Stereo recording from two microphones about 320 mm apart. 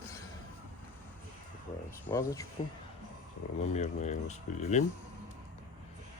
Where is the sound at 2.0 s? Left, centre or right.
Centre.